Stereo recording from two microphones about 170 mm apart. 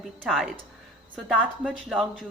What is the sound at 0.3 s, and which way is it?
A woman's voice, centre (ahead or behind).